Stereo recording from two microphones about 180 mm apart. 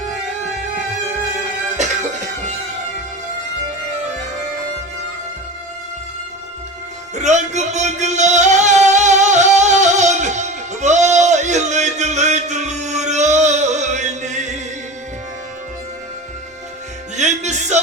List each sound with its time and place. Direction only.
1.7 s music: 40° right (ahead or behind)
7.2 s music: 40° right (ahead or behind)
17.2 s music: 40° right (ahead or behind)